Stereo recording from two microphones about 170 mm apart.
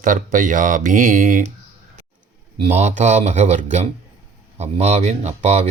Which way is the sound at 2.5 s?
35° right (ahead or behind).